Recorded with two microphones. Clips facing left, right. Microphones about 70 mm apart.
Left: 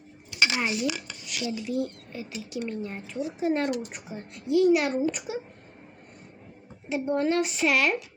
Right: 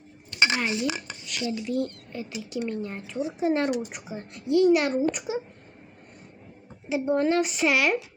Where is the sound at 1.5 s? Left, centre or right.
Centre.